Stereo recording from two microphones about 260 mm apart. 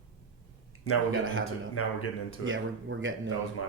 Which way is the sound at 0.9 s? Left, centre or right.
Left.